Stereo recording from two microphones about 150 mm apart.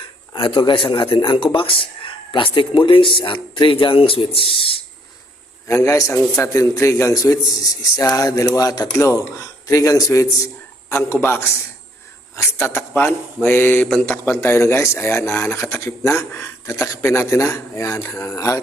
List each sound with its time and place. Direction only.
0.3 s speech: 30° left (ahead or behind)
5.6 s a man's voice: 20° left (ahead or behind)
12.4 s speech: 15° left (ahead or behind)